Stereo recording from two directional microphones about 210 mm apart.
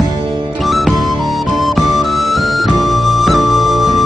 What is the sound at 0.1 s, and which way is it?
Music, 25° right (ahead or behind).